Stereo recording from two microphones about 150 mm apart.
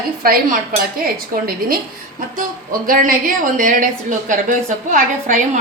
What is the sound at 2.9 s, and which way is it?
Speech, 65° right (ahead or behind).